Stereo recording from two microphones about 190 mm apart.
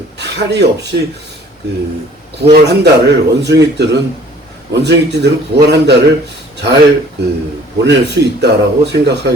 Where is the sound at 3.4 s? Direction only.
65° right (ahead or behind).